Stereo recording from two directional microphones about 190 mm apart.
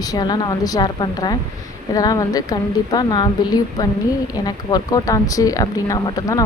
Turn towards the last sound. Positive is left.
turn(degrees=20)  # may be behind; listen again after turning